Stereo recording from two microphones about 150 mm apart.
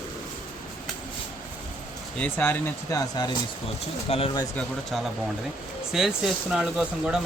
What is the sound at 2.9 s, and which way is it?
Speech, 25° left (ahead or behind).